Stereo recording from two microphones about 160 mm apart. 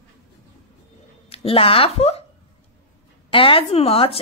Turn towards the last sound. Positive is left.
turn(degrees=35)  # may be behind; listen again after turning